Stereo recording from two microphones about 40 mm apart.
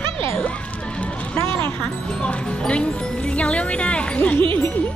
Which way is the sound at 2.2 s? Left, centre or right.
Left.